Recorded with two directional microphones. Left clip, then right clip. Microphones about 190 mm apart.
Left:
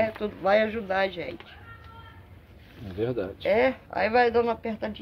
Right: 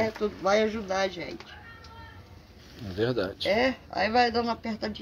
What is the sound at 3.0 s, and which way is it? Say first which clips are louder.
Speech: right 1 dB; 5° right (ahead or behind).